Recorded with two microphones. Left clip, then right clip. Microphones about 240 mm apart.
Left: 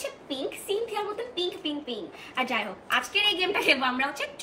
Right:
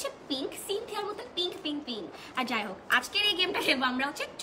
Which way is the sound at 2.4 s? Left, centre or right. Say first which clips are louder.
Left 3 dB; centre.